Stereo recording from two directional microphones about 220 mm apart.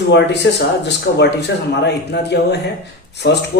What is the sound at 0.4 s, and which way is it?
A man's voice, 50° left (ahead or behind).